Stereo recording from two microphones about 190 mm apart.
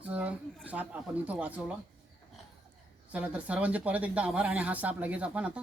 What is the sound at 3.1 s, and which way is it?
Speech, 5° right (ahead or behind).